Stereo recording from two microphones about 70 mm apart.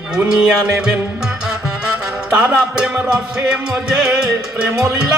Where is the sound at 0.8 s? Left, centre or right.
Centre.